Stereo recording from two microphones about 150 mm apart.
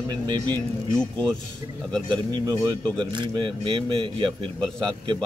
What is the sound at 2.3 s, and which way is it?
Speech, 25° right (ahead or behind).